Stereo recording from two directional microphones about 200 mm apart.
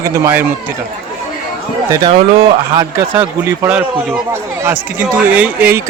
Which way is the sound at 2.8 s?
10° right (ahead or behind).